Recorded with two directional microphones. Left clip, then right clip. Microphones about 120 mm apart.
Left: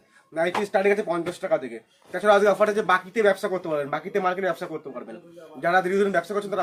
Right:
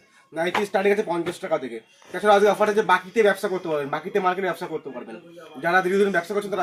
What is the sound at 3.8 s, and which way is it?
Speech, 60° left (ahead or behind).